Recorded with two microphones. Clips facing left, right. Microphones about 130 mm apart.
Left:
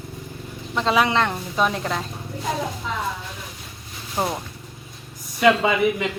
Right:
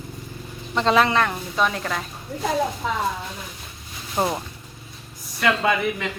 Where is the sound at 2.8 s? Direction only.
50° right (ahead or behind).